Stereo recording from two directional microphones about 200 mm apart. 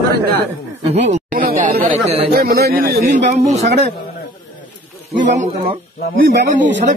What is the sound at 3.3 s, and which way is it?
Speech, 35° right (ahead or behind).